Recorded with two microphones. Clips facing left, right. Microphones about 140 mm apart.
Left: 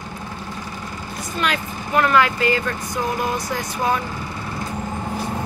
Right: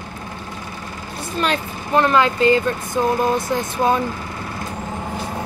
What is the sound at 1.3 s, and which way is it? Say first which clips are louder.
Speech: right 2 dB; 30° right (ahead or behind).